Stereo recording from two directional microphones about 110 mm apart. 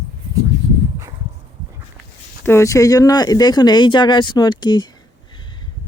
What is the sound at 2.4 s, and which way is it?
Speech, 25° left (ahead or behind).